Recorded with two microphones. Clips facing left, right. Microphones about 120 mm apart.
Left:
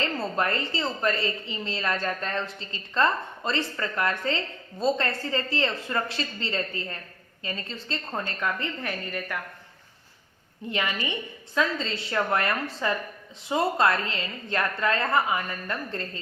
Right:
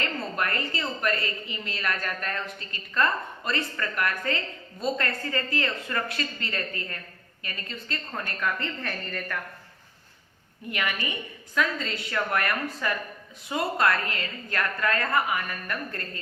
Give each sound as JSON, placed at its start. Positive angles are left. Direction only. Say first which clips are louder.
{"t": 0.0, "sound": "a woman's voice", "louder": "left 3 dB", "side_deg": 30}
{"t": 10.7, "sound": "a woman's voice", "louder": "left 2 dB", "side_deg": 25}